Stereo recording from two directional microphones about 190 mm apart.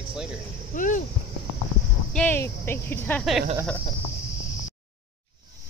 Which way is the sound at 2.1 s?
5° left (ahead or behind).